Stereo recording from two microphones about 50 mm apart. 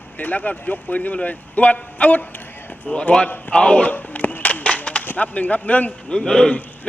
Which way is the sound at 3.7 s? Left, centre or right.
Left.